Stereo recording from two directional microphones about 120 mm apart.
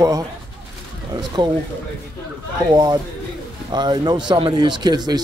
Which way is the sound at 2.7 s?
35° right (ahead or behind).